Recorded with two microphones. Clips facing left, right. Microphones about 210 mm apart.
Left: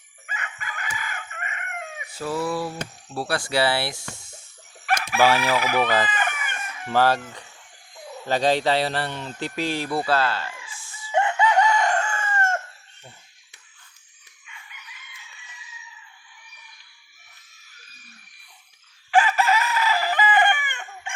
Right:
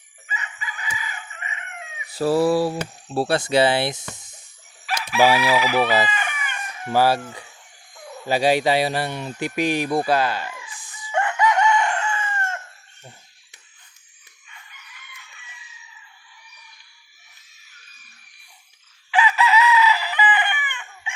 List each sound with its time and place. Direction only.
0.3 s chicken: 55° left (ahead or behind)
2.0 s speech: 35° right (ahead or behind)
3.2 s speech: 25° right (ahead or behind)
4.9 s chicken: 55° left (ahead or behind)
5.2 s speech: 10° right (ahead or behind)
5.5 s chicken: 50° left (ahead or behind)
5.8 s speech: 10° right (ahead or behind)
6.1 s chicken: 50° left (ahead or behind)
6.6 s chicken: 35° right (ahead or behind)
6.9 s speech: 10° right (ahead or behind)
10.8 s chicken: 15° right (ahead or behind)
11.1 s chicken: 25° left (ahead or behind); by 12.5 s 45° left (ahead or behind)
19.1 s chicken: 45° left (ahead or behind)